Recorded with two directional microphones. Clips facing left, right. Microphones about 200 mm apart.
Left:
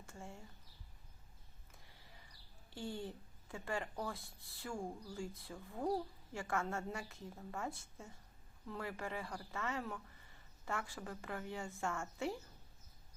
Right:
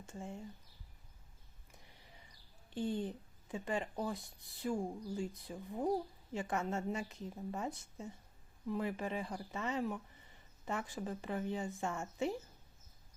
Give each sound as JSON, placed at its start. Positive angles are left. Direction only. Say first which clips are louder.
{"t": 0.0, "sound": "a woman's voice", "louder": "right 6 dB", "side_deg": -20}
{"t": 1.7, "sound": "a sound", "louder": "right 3 dB", "side_deg": -20}
{"t": 2.6, "sound": "a woman's voice", "louder": "right 7 dB", "side_deg": -20}